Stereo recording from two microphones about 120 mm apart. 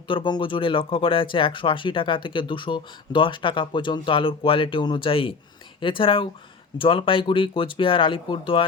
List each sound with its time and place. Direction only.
0.1 s speech: 40° left (ahead or behind)